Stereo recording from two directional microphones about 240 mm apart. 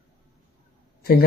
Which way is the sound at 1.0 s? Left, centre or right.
Left.